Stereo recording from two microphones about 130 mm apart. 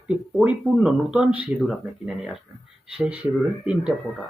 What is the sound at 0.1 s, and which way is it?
Speech, 5° right (ahead or behind).